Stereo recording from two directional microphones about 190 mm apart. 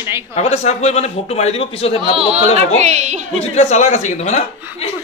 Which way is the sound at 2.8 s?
35° right (ahead or behind).